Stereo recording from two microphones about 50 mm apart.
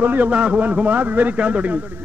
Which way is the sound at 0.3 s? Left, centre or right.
Right.